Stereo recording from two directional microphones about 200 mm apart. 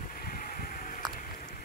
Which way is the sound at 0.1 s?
45° left (ahead or behind).